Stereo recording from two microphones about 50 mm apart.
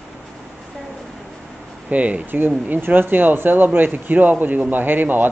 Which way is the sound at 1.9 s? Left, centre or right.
Right.